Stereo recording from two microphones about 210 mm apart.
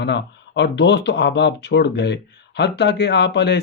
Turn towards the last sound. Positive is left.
turn(degrees=55)  # may be behind; listen again after turning